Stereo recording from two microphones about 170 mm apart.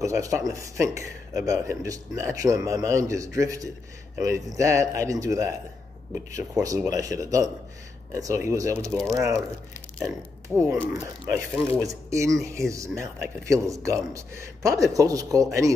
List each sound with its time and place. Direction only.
0.0 s speech: 15° right (ahead or behind)
8.8 s speech: 5° left (ahead or behind)
9.1 s speech: 15° right (ahead or behind)
10.5 s speech: 15° right (ahead or behind)